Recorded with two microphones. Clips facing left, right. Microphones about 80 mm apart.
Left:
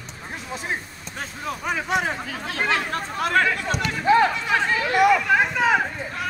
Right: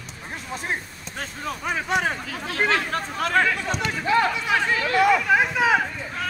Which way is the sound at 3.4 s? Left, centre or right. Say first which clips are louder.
Even; centre.